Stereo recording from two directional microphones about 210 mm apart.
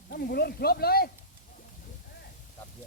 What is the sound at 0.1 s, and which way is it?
Speech, 50° left (ahead or behind).